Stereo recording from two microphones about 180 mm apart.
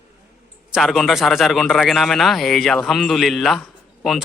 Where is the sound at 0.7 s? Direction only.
Centre (ahead or behind).